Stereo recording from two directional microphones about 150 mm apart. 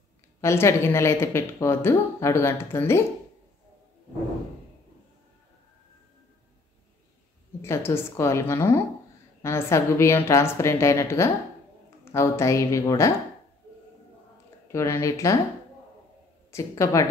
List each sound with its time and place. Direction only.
0.4 s a woman's voice: 15° left (ahead or behind)
7.6 s a woman's voice: 15° left (ahead or behind)
14.7 s a woman's voice: 20° left (ahead or behind)
16.5 s a woman's voice: 20° left (ahead or behind)